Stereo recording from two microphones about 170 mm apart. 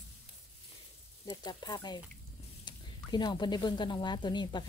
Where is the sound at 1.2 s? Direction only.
25° left (ahead or behind).